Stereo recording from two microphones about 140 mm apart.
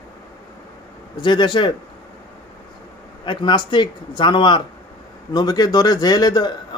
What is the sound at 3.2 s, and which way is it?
A man's voice, 35° left (ahead or behind).